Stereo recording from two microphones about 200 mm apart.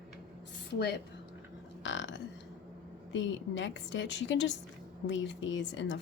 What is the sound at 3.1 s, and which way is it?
Speech, 65° left (ahead or behind).